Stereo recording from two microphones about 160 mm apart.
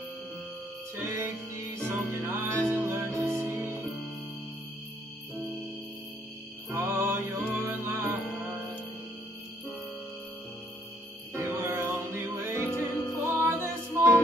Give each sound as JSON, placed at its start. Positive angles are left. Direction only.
{"t": 0.9, "sound": "music", "side_deg": -15}
{"t": 6.7, "sound": "music", "side_deg": -15}
{"t": 11.3, "sound": "music", "side_deg": -15}
{"t": 12.9, "sound": "music", "side_deg": 20}
{"t": 13.4, "sound": "music", "side_deg": -15}